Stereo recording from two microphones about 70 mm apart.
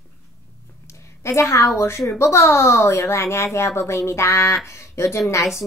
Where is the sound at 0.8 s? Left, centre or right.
Left.